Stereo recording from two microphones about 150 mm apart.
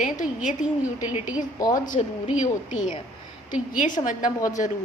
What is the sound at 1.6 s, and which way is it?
Speech, 25° left (ahead or behind).